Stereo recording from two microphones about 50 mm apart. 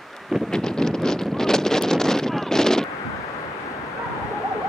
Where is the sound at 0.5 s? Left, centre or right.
Centre.